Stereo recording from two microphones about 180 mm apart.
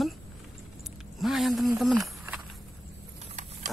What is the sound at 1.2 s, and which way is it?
Speech, centre (ahead or behind).